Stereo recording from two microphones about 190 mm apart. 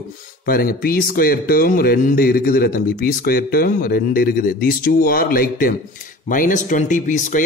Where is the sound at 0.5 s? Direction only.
50° left (ahead or behind).